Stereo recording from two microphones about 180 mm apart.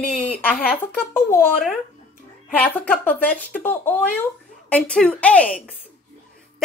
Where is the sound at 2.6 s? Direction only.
10° left (ahead or behind).